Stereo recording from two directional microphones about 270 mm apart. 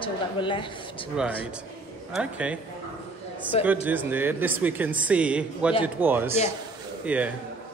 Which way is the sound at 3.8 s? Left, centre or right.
Centre.